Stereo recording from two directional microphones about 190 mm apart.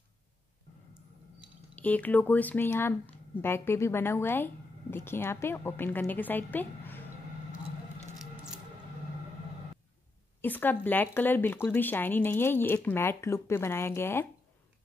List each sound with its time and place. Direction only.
1.8 s speech: 10° left (ahead or behind)
10.4 s speech: 10° left (ahead or behind)